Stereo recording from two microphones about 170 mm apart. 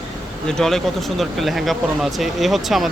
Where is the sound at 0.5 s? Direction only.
Centre (ahead or behind).